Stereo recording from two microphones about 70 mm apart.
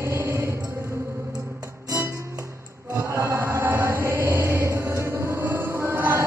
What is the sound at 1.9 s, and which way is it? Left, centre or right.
Music, right.